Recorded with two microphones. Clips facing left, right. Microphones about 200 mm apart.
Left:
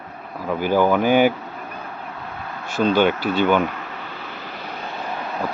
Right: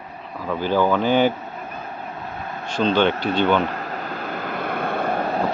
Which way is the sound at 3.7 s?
40° right (ahead or behind).